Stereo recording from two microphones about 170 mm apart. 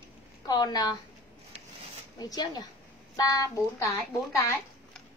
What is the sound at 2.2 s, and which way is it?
A woman's voice, 25° left (ahead or behind).